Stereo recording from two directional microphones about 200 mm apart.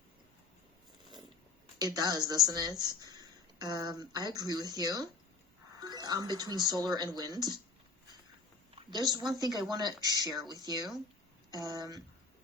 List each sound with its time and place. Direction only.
1.8 s speech: 20° right (ahead or behind)
8.7 s a sound: 20° right (ahead or behind)
9.4 s speech: 20° right (ahead or behind)